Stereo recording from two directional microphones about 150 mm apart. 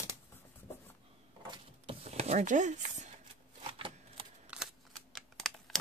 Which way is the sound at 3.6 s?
35° right (ahead or behind).